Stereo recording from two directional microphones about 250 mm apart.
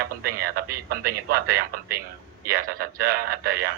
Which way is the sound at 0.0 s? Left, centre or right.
Right.